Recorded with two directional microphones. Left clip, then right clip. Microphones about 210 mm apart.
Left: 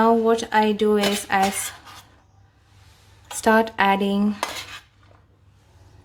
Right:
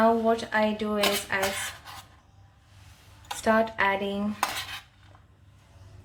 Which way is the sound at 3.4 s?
50° left (ahead or behind).